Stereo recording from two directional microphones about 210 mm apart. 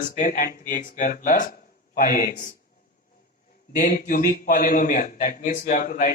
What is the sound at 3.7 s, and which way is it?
A man's voice, 40° left (ahead or behind).